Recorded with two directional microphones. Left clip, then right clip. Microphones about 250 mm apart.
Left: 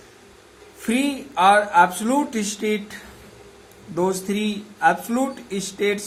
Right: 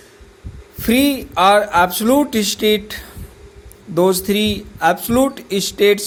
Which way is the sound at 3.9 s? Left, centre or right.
Right.